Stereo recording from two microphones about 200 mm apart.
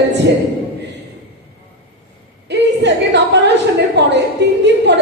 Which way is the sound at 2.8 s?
60° right (ahead or behind).